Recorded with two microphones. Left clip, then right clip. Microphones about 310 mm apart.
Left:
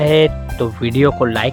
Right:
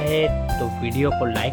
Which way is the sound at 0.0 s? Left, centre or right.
Left.